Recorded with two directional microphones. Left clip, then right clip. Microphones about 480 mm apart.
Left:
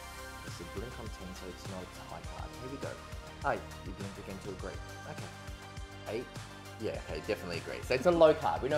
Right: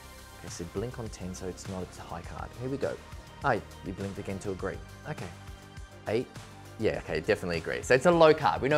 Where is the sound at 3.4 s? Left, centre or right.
Right.